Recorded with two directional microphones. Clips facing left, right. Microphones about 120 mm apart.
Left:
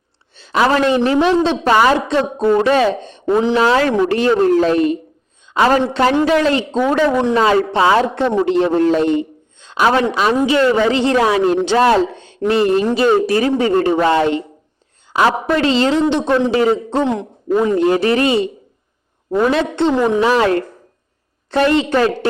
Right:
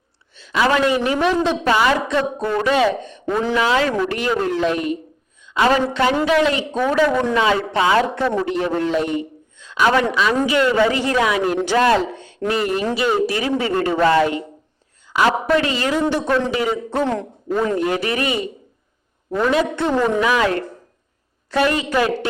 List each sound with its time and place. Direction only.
0.5 s speech: 40° left (ahead or behind)
1.2 s speech: 25° left (ahead or behind)
1.6 s speech: 40° left (ahead or behind); by 3.6 s 25° left (ahead or behind)
3.6 s speech: 40° left (ahead or behind)
6.9 s speech: 20° left (ahead or behind)
7.3 s a man's voice: 35° left (ahead or behind)
15.0 s a sound: 30° left (ahead or behind)
15.5 s speech: 30° left (ahead or behind)
17.7 s speech: 30° left (ahead or behind)
19.5 s speech: 25° left (ahead or behind)
20.2 s speech: 35° left (ahead or behind)